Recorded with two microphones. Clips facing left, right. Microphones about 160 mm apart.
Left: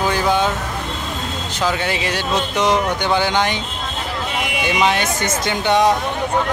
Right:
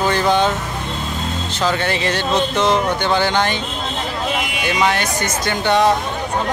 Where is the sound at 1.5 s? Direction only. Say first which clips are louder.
Right 1 dB; 10° left (ahead or behind).